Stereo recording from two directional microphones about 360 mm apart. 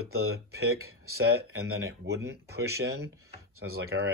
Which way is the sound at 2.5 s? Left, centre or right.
Right.